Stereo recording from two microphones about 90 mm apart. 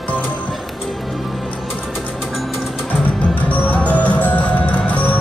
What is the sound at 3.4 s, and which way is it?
Music, 15° left (ahead or behind).